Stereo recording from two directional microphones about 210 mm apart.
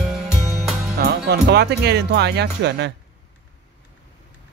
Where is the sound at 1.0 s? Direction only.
50° right (ahead or behind).